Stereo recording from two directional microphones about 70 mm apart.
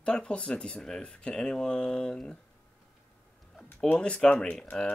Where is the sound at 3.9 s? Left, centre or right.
Centre.